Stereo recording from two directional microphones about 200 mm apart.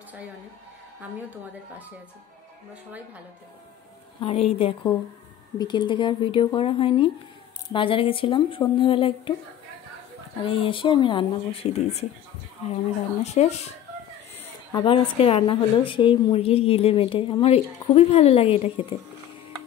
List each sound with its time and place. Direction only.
1.1 s a woman's voice: 10° right (ahead or behind)
4.2 s a woman's voice: 30° left (ahead or behind)
10.4 s a woman's voice: 25° left (ahead or behind)
14.4 s a woman's voice: 20° left (ahead or behind)